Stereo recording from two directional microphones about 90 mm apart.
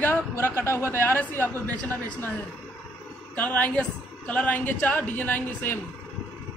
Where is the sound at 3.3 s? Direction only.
15° left (ahead or behind).